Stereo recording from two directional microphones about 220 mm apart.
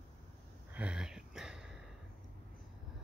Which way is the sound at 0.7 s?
5° right (ahead or behind).